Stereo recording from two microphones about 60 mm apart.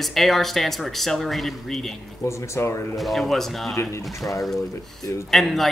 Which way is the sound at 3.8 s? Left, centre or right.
Left.